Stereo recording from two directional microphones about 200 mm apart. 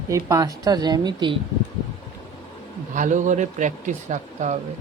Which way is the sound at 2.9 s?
40° right (ahead or behind).